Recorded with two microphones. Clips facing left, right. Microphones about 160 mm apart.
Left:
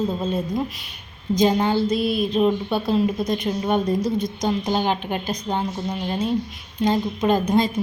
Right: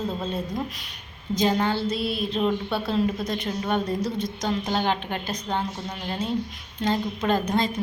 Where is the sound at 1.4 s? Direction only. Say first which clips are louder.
Left 4 dB; 15° left (ahead or behind).